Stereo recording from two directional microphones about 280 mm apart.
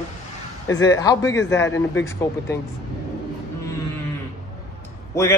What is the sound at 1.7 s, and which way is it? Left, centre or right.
Speech, left.